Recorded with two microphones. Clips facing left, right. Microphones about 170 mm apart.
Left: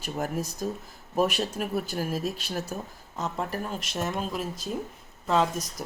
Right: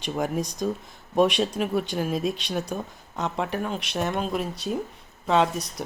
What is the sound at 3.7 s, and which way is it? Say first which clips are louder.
Speech: right 3 dB; centre (ahead or behind).